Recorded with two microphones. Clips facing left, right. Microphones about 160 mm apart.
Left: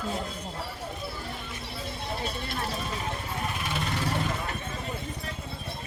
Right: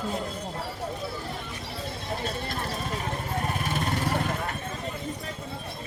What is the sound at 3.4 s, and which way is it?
Vehicle, 45° right (ahead or behind).